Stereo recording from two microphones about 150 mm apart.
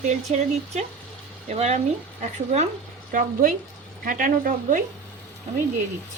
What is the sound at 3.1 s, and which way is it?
Speech, 70° right (ahead or behind).